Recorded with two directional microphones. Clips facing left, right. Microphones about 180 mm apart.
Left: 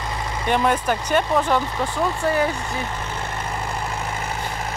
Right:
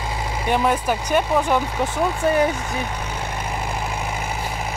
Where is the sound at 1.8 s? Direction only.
20° right (ahead or behind).